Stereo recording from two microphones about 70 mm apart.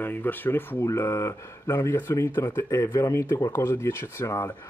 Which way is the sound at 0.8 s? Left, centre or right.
Left.